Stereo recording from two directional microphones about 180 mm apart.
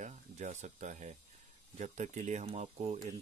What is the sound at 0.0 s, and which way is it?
Speech, 40° right (ahead or behind).